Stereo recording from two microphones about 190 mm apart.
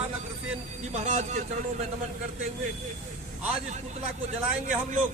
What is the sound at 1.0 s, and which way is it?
Speech, 40° right (ahead or behind).